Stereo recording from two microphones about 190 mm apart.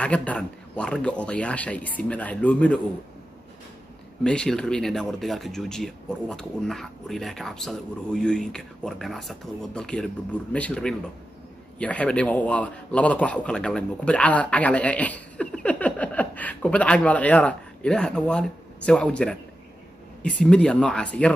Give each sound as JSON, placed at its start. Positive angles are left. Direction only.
{"t": 0.0, "sound": "a man's voice", "side_deg": 5}
{"t": 4.2, "sound": "a man's voice", "side_deg": 5}